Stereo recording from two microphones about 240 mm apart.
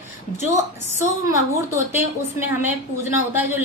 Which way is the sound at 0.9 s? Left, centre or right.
Centre.